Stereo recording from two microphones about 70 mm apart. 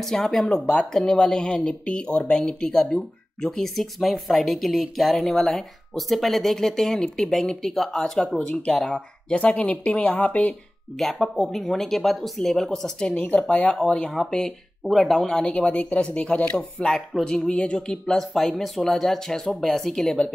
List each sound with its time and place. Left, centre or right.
0.0 s speech: centre; by 10.5 s left
11.0 s speech: centre